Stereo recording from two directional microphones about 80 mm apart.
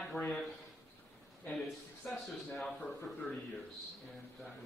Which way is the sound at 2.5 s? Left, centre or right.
Centre.